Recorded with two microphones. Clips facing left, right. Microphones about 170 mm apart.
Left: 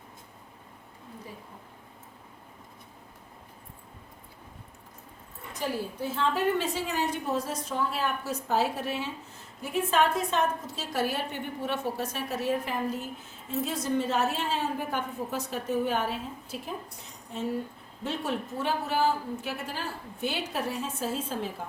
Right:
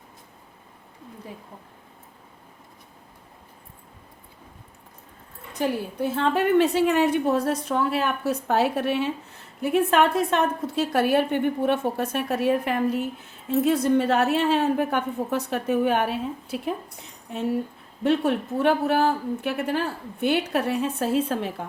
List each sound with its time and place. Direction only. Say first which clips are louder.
5.5 s a woman's voice: right 6 dB; 60° right (ahead or behind)